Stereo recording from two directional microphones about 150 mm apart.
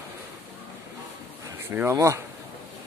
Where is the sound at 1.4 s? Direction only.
15° right (ahead or behind).